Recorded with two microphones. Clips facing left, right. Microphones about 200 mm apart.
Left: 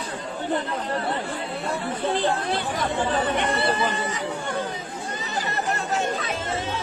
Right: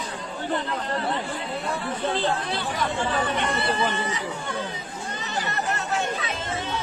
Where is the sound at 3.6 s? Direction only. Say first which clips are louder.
Left 1 dB; 50° left (ahead or behind).